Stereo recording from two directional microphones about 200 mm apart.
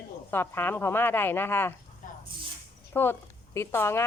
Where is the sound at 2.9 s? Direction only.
10° left (ahead or behind).